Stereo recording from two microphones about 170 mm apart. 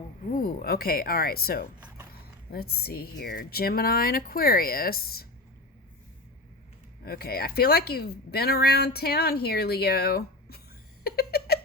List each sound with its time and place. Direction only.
0.3 s speech: 55° left (ahead or behind)
7.0 s speech: 65° left (ahead or behind)
11.0 s a sound: 65° left (ahead or behind)